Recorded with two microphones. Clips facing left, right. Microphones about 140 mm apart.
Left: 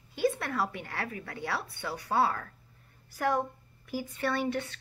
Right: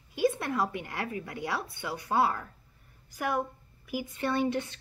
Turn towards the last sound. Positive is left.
turn(degrees=-20)  # may be behind; listen again after turning